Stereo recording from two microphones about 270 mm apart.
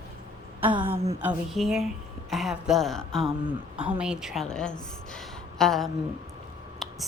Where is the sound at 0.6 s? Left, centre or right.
Centre.